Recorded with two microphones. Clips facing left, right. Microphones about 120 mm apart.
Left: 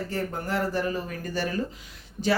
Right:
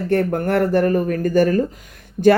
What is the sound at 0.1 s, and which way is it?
Speech, 60° right (ahead or behind).